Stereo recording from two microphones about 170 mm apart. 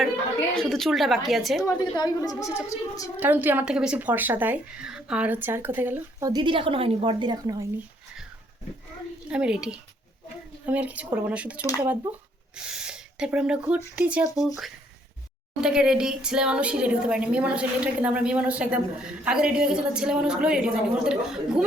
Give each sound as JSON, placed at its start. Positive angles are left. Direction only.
{"t": 0.5, "sound": "a woman's voice", "side_deg": 0}
{"t": 1.6, "sound": "a woman's voice", "side_deg": 25}
{"t": 3.2, "sound": "speech", "side_deg": -10}
{"t": 9.3, "sound": "a woman's voice", "side_deg": -5}